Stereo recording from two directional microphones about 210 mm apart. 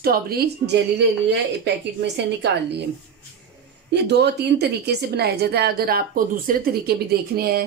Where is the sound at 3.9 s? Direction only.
55° right (ahead or behind).